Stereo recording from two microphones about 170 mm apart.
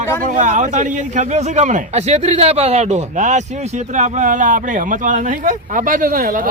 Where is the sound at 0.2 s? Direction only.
50° right (ahead or behind).